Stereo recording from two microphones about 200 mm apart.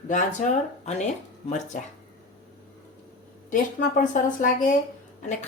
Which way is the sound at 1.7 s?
40° left (ahead or behind).